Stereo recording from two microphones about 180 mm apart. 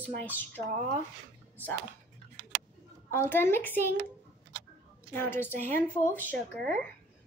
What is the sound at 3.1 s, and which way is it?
Speech, 10° left (ahead or behind).